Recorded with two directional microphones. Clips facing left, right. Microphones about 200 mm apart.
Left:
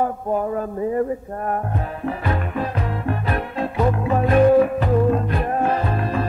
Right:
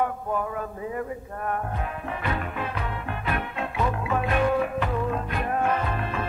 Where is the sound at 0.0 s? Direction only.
40° left (ahead or behind).